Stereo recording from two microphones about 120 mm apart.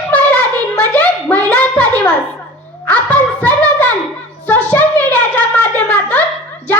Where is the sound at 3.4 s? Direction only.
10° left (ahead or behind).